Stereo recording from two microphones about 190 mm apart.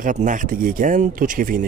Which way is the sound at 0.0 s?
40° right (ahead or behind).